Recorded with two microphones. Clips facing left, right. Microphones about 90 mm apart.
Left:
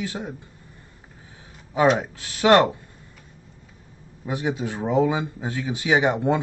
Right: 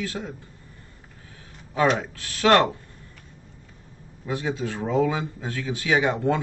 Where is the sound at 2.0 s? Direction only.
15° left (ahead or behind).